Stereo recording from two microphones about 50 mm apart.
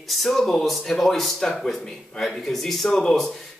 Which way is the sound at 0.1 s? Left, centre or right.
Centre.